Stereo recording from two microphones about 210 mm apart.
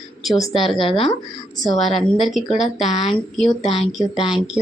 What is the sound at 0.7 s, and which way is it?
Speech, 25° left (ahead or behind).